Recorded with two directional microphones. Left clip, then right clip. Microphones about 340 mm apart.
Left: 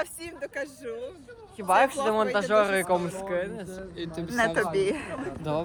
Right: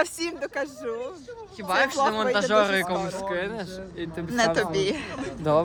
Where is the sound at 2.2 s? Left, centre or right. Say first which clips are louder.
Right 1 dB; centre.